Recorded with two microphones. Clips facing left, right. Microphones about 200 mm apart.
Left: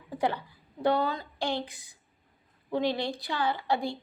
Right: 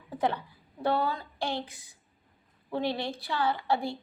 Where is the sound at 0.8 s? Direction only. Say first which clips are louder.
Left 2 dB; 15° left (ahead or behind).